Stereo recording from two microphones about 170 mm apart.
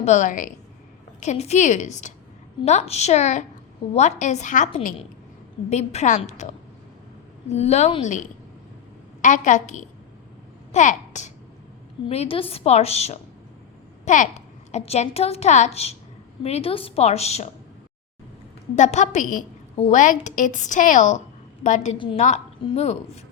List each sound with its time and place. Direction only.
0.0 s a woman's voice: 45° left (ahead or behind)
7.5 s a woman's voice: 40° left (ahead or behind)
18.8 s a woman's voice: 45° left (ahead or behind)
21.9 s a woman's voice: 30° left (ahead or behind)
22.2 s a woman's voice: 40° left (ahead or behind)